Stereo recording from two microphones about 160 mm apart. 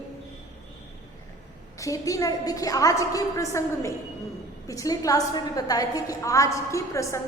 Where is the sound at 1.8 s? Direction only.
20° left (ahead or behind).